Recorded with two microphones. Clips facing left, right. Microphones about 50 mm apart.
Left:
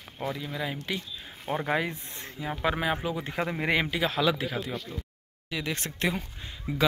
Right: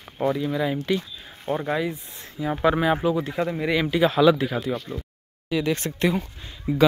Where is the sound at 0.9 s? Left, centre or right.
Centre.